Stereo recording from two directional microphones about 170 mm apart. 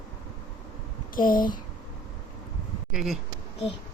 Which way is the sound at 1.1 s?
55° left (ahead or behind).